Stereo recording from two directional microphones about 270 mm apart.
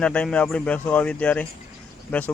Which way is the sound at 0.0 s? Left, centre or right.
Centre.